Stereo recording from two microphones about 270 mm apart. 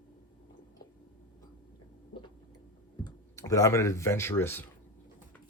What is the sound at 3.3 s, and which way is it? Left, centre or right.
Speech, centre.